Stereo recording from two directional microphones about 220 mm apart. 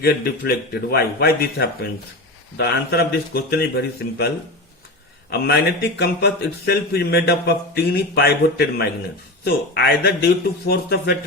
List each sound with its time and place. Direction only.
0.0 s speech: 45° left (ahead or behind)
5.3 s speech: 45° left (ahead or behind)